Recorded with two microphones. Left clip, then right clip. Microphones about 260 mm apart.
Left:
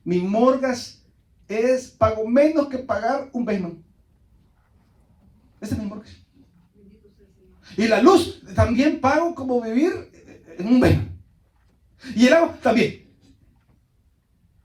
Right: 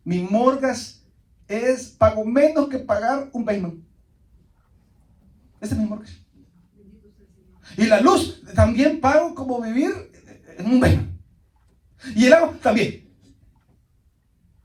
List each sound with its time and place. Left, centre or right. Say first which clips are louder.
0.3 s speech: right 1 dB; right
5.5 s speech: right 3 dB; right
7.6 s speech: right 1 dB; right
11.9 s speech: right 2 dB; right